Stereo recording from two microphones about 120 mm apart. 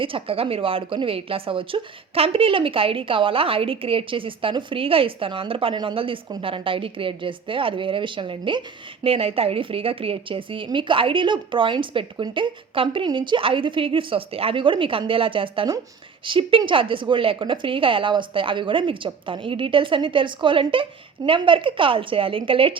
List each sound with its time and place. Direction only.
0.0 s a woman's voice: 50° right (ahead or behind)